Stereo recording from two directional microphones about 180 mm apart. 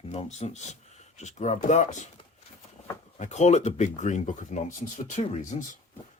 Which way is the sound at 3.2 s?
40° left (ahead or behind).